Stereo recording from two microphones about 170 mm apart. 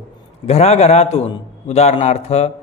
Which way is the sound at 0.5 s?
35° left (ahead or behind).